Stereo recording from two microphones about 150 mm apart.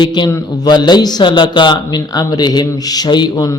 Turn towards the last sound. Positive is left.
turn(degrees=25)  # may be behind; listen again after turning